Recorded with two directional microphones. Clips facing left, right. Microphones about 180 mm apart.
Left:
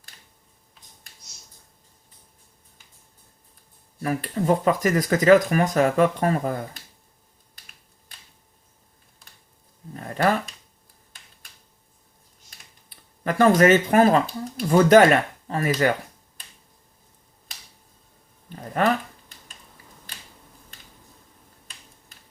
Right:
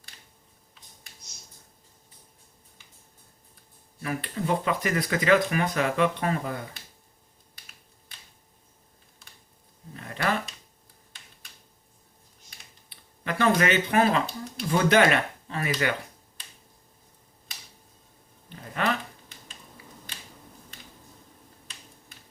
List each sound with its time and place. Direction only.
4.0 s speech: 40° left (ahead or behind)
12.9 s speech: 45° left (ahead or behind)
18.4 s a sound: 45° left (ahead or behind)